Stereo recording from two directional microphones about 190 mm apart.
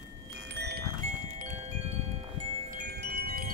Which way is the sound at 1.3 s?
35° right (ahead or behind).